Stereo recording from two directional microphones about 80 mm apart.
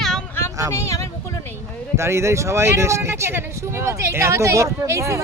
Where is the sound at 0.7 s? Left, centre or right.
Left.